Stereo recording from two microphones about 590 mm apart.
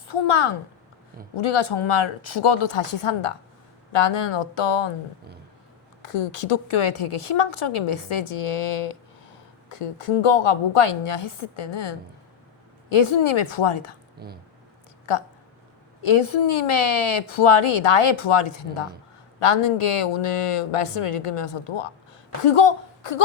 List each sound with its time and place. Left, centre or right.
0.1 s a woman's voice: left
6.0 s a woman's voice: left
14.2 s speech: centre
16.0 s a woman's voice: left
20.0 s a woman's voice: left